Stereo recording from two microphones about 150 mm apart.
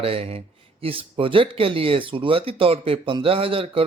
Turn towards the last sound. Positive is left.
turn(degrees=-40)  # may be behind; listen again after turning